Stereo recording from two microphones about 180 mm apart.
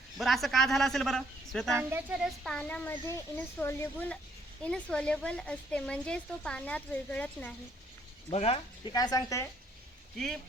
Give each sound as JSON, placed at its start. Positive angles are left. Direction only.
{"t": 0.2, "sound": "a man's voice", "side_deg": 0}
{"t": 1.7, "sound": "speech", "side_deg": -10}
{"t": 8.3, "sound": "speech", "side_deg": 35}
{"t": 8.9, "sound": "speech", "side_deg": 20}